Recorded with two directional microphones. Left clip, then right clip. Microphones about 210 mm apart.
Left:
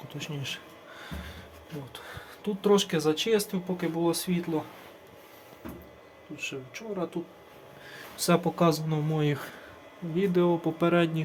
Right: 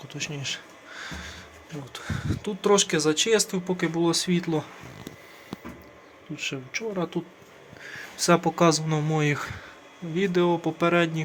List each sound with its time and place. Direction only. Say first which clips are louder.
0.1 s speech: right 5 dB; 5° right (ahead or behind)
6.3 s speech: right 5 dB; 25° right (ahead or behind)
8.1 s a man's voice: right 4 dB; 5° right (ahead or behind)